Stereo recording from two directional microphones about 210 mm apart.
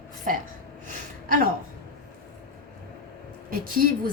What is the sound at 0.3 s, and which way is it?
Speech, 40° right (ahead or behind).